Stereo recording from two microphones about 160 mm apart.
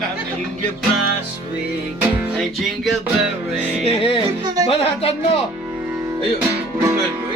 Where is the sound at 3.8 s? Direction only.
35° left (ahead or behind).